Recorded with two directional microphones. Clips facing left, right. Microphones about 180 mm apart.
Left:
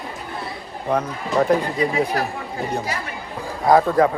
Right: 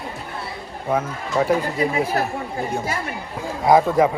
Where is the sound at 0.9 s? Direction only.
5° right (ahead or behind).